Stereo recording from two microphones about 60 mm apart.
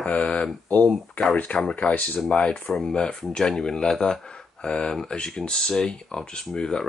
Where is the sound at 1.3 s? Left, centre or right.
Left.